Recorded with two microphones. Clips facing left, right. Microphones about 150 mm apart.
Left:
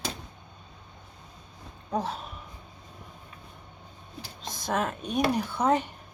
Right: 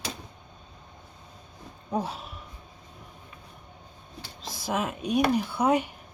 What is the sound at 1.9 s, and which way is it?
Speech, 10° right (ahead or behind).